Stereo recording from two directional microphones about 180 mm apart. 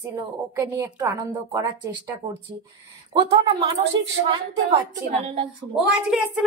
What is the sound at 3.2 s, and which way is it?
Speech, 30° right (ahead or behind).